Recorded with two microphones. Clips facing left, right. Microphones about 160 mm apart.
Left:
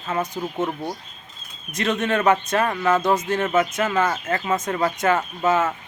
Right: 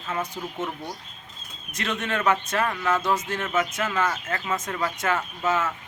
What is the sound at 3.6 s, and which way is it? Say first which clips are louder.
Speech: left 3 dB; 50° left (ahead or behind).